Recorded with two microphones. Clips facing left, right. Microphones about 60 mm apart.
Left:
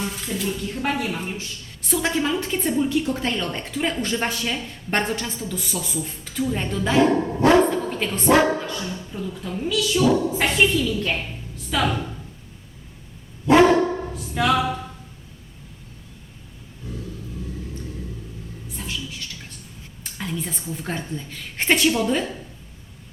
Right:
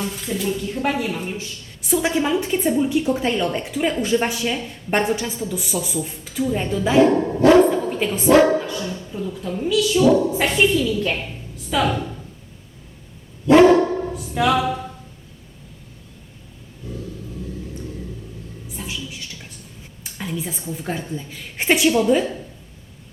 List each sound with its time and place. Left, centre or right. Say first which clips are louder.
0.3 s a woman's voice: right 5 dB; centre
8.5 s dog: right 5 dB; centre
9.2 s a woman's voice: right 3 dB; centre
14.3 s a woman's voice: right 2 dB; centre
20.1 s a woman's voice: right 1 dB; centre